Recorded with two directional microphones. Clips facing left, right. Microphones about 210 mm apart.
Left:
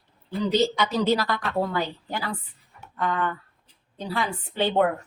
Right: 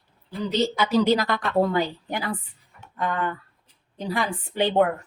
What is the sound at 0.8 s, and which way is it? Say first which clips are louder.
A woman's voice: right 3 dB; 15° right (ahead or behind).